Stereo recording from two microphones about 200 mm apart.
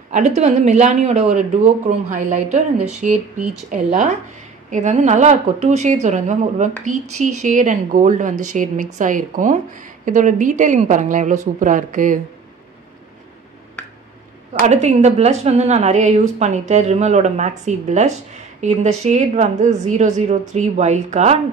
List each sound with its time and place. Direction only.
0.1 s speech: 35° right (ahead or behind)
14.5 s speech: 35° right (ahead or behind)